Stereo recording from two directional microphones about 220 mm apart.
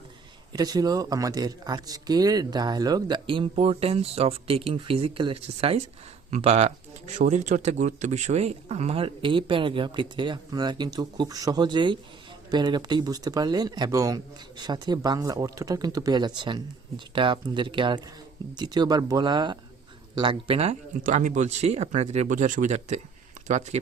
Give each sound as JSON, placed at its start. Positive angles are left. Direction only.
{"t": 0.5, "sound": "speech", "side_deg": -15}